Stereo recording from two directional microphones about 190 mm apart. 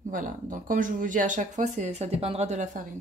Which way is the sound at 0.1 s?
45° right (ahead or behind).